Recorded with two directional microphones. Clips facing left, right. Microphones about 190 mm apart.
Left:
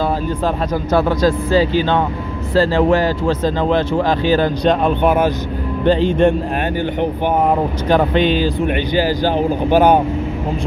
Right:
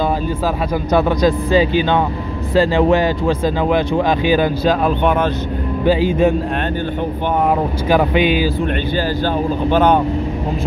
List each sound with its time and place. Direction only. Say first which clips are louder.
0.9 s speech: even; 15° right (ahead or behind)
4.6 s speech: left 3 dB; centre (ahead or behind)
5.9 s speech: left 1 dB; 5° right (ahead or behind)
7.4 s speech: even; 5° right (ahead or behind)
8.6 s speech: left 2 dB; 15° left (ahead or behind)